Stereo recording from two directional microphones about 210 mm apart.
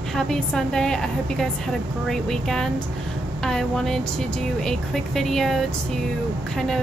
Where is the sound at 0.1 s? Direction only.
Centre (ahead or behind).